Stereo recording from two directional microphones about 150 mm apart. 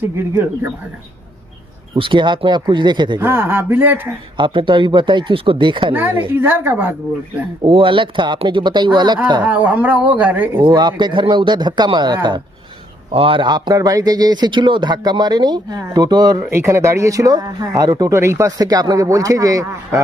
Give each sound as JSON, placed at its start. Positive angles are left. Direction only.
{"t": 2.0, "sound": "speech", "side_deg": -30}
{"t": 3.2, "sound": "speech", "side_deg": -15}
{"t": 4.4, "sound": "speech", "side_deg": -35}
{"t": 5.9, "sound": "speech", "side_deg": -15}
{"t": 7.6, "sound": "speech", "side_deg": -35}
{"t": 9.4, "sound": "speech", "side_deg": -10}
{"t": 10.6, "sound": "a man's voice", "side_deg": -30}